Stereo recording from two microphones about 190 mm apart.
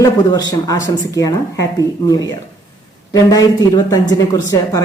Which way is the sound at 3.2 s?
20° left (ahead or behind).